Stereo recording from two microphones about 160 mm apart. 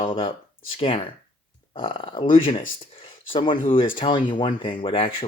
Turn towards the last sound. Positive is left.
turn(degrees=35)  # may be behind; listen again after turning